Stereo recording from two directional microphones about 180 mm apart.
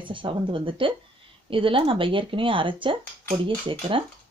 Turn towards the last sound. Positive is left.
turn(degrees=-30)  # may be behind; listen again after turning